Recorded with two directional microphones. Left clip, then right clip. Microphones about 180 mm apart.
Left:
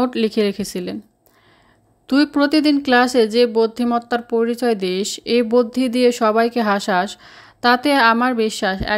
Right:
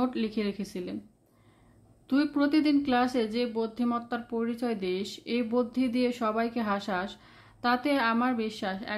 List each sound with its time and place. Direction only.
0.0 s speech: 40° left (ahead or behind)
2.0 s speech: 40° left (ahead or behind)